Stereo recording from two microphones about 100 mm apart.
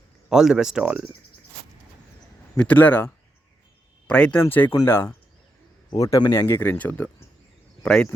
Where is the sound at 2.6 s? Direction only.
15° left (ahead or behind).